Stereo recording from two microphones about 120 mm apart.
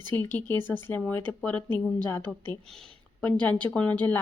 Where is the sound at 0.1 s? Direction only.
15° left (ahead or behind).